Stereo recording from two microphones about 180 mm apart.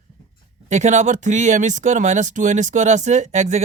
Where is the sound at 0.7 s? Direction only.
40° right (ahead or behind).